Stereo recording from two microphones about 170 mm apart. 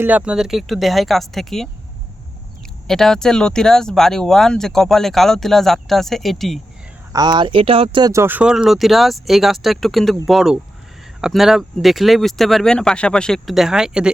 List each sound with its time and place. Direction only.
0.0 s speech: 5° right (ahead or behind)
2.8 s speech: 5° left (ahead or behind)
7.1 s speech: 25° right (ahead or behind)
8.1 s speech: 15° right (ahead or behind)